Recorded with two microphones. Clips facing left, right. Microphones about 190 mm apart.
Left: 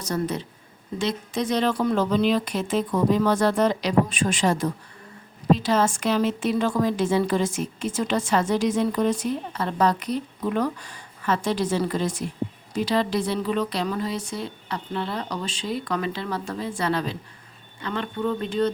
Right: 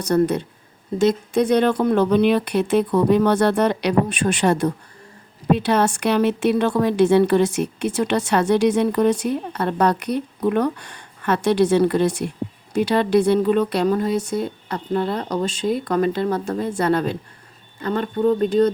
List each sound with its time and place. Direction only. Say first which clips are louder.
0.0 s speech: right 8 dB; 60° right (ahead or behind)
0.9 s speech: right 9 dB; 35° right (ahead or behind)
1.3 s a woman's voice: right 6 dB; 60° right (ahead or behind); by 18.7 s 40° right (ahead or behind)